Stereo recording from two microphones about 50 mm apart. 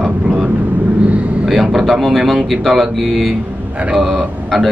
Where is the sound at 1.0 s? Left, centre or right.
Right.